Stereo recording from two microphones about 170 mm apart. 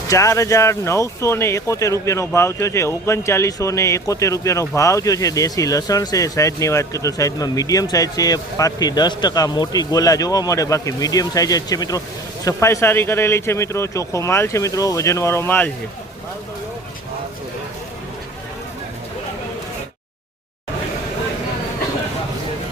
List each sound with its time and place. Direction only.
0.1 s speech: 20° left (ahead or behind)